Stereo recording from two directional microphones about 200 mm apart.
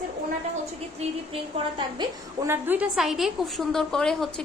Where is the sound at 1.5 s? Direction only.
20° right (ahead or behind).